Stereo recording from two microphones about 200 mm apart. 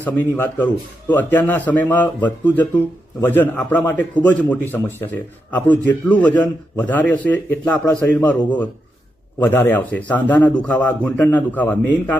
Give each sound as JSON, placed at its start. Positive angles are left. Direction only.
{"t": 0.0, "sound": "a man's voice", "side_deg": 10}